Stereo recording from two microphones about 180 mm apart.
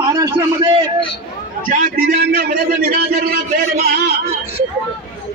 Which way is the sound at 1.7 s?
55° right (ahead or behind).